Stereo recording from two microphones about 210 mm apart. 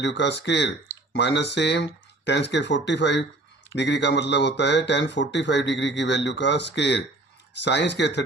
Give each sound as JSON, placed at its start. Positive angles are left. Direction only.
{"t": 0.0, "sound": "a man's voice", "side_deg": 55}